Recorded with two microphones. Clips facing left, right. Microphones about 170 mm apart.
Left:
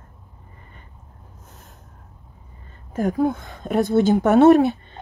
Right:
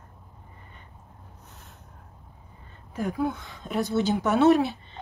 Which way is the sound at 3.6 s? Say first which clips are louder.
Left 8 dB; 55° left (ahead or behind).